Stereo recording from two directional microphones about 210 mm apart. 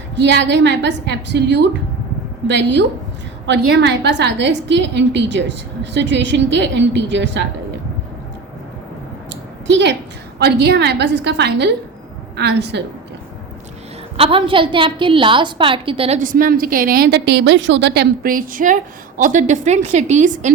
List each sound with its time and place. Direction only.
0.2 s a woman's voice: 55° right (ahead or behind)
9.3 s a sound: 60° right (ahead or behind)
10.3 s a woman's voice: 50° right (ahead or behind)
14.2 s a woman's voice: 25° right (ahead or behind)